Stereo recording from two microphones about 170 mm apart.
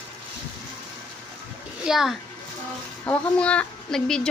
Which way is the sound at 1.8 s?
Centre (ahead or behind).